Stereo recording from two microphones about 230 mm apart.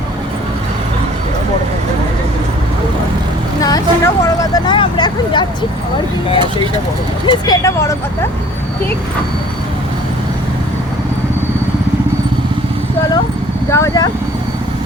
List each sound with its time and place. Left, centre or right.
3.6 s vehicle: centre
7.3 s speech: centre
13.7 s speech: centre